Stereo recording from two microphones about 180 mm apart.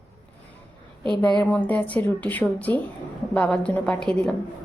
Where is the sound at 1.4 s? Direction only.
10° left (ahead or behind).